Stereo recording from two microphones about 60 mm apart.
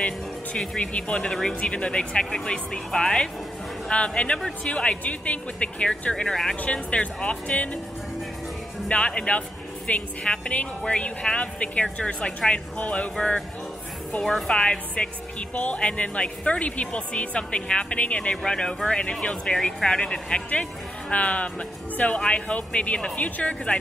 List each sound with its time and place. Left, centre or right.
0.7 s speech: centre
1.5 s speech: centre
6.5 s speech: left
8.8 s speech: centre
14.1 s speech: left